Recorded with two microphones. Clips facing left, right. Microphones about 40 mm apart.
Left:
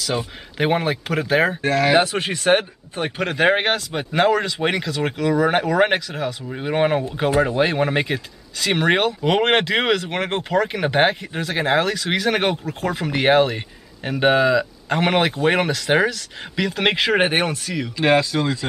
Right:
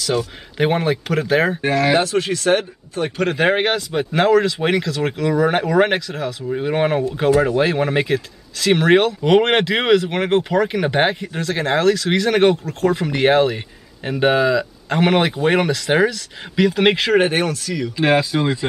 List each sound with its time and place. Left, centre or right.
0.6 s speech: centre
2.0 s speech: left
3.2 s speech: centre
17.2 s speech: left
17.9 s speech: centre